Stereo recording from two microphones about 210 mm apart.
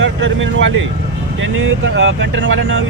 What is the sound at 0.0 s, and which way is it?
Speech, 60° right (ahead or behind).